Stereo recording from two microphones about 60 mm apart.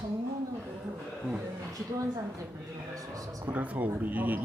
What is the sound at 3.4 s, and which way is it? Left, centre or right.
Speech, right.